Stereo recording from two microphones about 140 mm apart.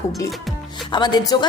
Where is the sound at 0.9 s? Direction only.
30° left (ahead or behind).